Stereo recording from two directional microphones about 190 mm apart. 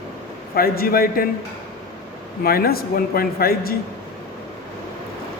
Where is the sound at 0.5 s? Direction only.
50° left (ahead or behind).